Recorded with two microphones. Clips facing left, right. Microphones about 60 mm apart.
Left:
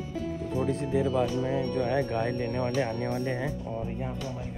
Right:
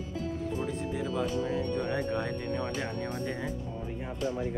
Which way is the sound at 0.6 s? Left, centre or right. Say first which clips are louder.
Left 6 dB; left.